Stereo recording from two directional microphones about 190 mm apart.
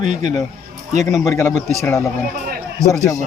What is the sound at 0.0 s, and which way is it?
Speech, 40° right (ahead or behind).